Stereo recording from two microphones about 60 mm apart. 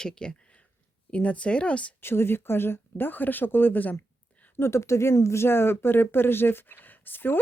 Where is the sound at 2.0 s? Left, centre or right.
Left.